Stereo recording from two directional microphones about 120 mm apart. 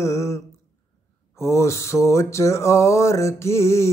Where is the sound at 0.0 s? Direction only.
25° left (ahead or behind).